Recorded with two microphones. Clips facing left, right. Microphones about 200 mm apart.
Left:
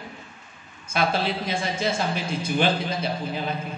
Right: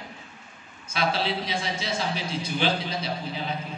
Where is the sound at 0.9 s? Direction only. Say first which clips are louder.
Left 2 dB; 50° left (ahead or behind).